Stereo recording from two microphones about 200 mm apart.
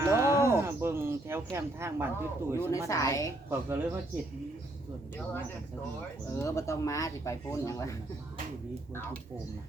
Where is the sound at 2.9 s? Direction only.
15° left (ahead or behind).